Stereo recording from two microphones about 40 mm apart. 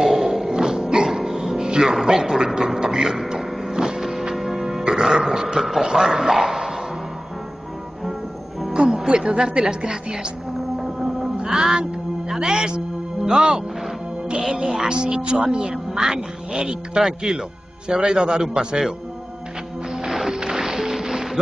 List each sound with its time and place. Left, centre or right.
0.0 s music: centre
1.7 s a man's voice: centre
3.3 s music: centre
8.7 s music: right
9.4 s a man's voice: right
11.4 s music: centre
13.3 s a man's voice: centre
15.7 s a man's voice: centre
19.9 s music: centre